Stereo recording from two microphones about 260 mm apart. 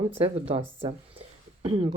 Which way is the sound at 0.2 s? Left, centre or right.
Right.